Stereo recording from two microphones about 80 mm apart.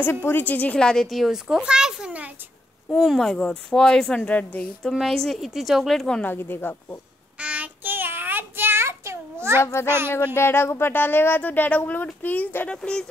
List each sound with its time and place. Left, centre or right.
0.0 s a woman's voice: left; by 2.3 s centre
2.9 s speech: centre
4.2 s speech: centre
4.8 s a woman's voice: centre
6.2 s speech: left
7.3 s child singing: centre; by 9.6 s right
9.6 s a child's voice: left
9.8 s speech: right
10.1 s speech: left
12.6 s speech: centre